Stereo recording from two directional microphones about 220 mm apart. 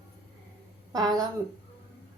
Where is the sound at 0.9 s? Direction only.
15° right (ahead or behind).